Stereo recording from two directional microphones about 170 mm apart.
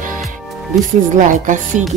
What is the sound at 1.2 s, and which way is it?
Music, 50° right (ahead or behind).